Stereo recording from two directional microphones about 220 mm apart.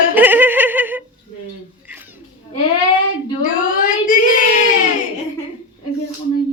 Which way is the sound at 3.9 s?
40° left (ahead or behind).